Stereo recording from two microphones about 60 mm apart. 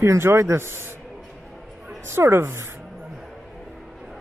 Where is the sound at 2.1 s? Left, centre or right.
Right.